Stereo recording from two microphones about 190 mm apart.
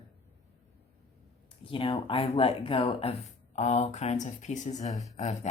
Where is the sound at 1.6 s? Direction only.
25° left (ahead or behind).